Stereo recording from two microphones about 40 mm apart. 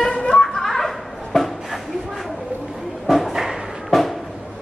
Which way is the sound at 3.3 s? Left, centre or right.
Centre.